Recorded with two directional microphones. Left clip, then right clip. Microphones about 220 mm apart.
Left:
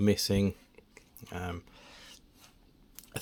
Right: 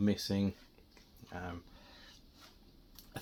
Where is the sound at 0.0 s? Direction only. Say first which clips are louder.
Left 7 dB; 45° left (ahead or behind).